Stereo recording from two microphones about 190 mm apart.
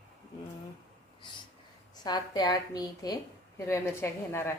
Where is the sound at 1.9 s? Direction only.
20° left (ahead or behind).